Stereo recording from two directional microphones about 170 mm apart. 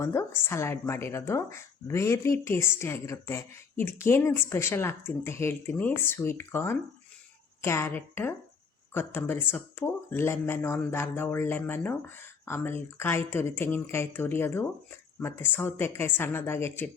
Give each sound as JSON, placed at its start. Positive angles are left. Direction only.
{"t": 0.0, "sound": "speech", "side_deg": 15}